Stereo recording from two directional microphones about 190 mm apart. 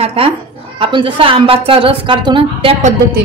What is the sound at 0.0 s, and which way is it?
A woman's voice, 30° right (ahead or behind).